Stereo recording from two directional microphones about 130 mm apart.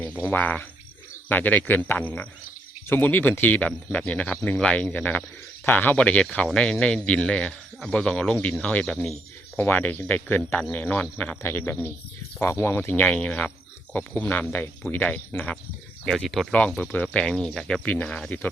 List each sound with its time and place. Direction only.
0.0 s speech: 15° left (ahead or behind)